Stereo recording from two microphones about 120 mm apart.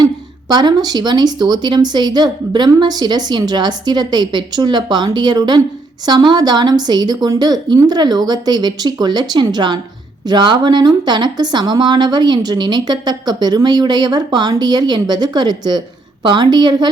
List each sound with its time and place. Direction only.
0.0 s speech: 40° right (ahead or behind)